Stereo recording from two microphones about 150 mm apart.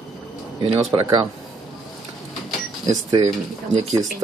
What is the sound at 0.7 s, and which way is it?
Speech, 35° right (ahead or behind).